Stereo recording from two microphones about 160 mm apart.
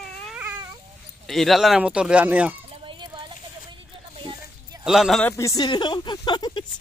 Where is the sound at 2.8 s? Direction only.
30° right (ahead or behind).